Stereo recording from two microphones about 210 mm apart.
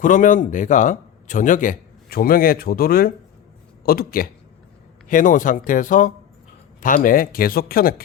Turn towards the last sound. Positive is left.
turn(degrees=45)  # may be behind; listen again after turning